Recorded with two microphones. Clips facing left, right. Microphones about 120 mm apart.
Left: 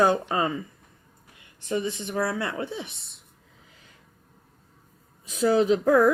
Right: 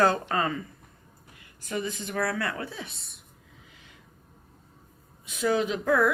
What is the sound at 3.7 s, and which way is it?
Snort, 35° left (ahead or behind).